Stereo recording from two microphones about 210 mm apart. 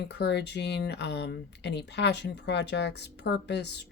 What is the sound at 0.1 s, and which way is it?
Speech, 55° left (ahead or behind).